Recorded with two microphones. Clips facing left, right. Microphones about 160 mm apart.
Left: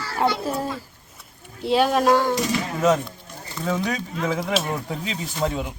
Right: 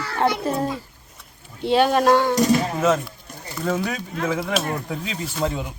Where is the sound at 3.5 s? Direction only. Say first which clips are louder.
Right 1 dB; 5° right (ahead or behind).